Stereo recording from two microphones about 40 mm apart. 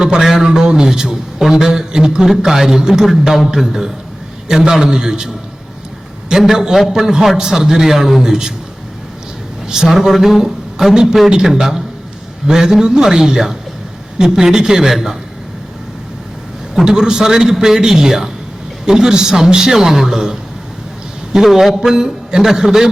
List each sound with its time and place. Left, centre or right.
0.0 s a man's voice: centre
6.3 s a man's voice: centre
9.6 s a woman's voice: centre
9.9 s a man's voice: centre
16.8 s a man's voice: centre
21.3 s a man's voice: centre